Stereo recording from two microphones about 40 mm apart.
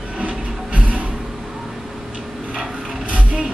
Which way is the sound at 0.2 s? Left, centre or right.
Right.